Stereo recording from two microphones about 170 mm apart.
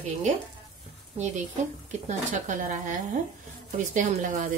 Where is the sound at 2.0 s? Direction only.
45° right (ahead or behind).